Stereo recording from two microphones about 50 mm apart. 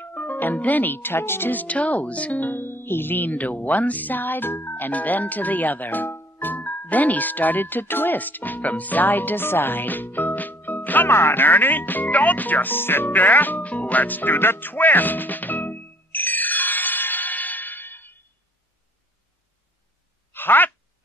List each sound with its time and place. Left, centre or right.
0.0 s speech: left
1.5 s speech: left
2.5 s speech: left
6.5 s speech: left
11.1 s music: left
20.3 s a sound: left